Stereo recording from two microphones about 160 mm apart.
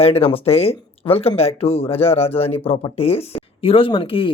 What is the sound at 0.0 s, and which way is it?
A man's voice, 40° left (ahead or behind).